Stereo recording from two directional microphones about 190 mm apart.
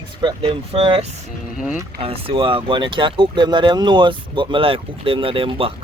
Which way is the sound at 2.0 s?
30° right (ahead or behind).